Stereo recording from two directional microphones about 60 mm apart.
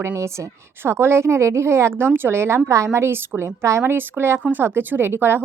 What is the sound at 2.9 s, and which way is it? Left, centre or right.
Speech, right.